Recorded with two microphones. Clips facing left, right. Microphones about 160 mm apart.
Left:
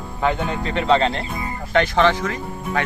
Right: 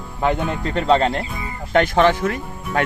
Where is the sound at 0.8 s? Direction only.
45° right (ahead or behind).